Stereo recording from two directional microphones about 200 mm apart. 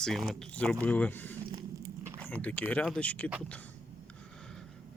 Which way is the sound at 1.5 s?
15° right (ahead or behind).